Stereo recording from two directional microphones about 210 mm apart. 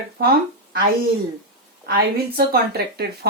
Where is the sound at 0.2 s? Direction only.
45° right (ahead or behind).